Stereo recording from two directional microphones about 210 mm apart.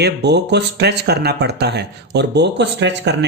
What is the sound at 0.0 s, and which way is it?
Speech, 55° right (ahead or behind).